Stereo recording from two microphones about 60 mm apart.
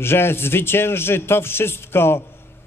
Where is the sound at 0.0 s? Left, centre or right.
Left.